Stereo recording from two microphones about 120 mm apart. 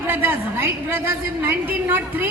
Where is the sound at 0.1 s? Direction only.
20° right (ahead or behind).